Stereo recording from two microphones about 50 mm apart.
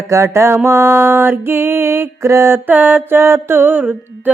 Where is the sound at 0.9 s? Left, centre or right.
Right.